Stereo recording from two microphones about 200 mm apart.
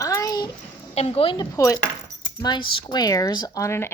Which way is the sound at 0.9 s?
30° left (ahead or behind).